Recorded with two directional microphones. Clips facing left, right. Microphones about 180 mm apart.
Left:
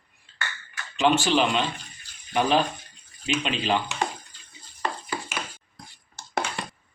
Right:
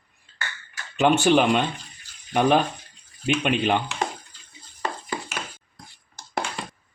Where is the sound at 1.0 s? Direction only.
55° right (ahead or behind).